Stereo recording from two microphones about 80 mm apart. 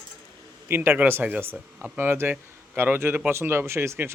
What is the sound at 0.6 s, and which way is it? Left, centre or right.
A man's voice, right.